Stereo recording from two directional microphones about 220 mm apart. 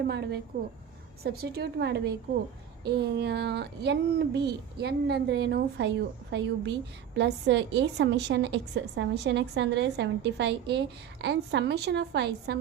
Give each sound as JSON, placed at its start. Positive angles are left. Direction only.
{"t": 0.1, "sound": "a woman's voice", "side_deg": -50}